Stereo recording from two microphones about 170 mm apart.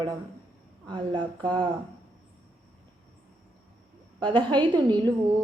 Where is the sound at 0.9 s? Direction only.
25° right (ahead or behind).